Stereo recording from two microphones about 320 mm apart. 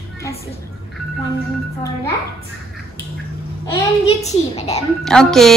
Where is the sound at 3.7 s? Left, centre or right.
Centre.